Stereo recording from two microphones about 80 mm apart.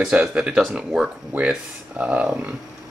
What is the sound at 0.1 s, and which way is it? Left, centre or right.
Speech, centre.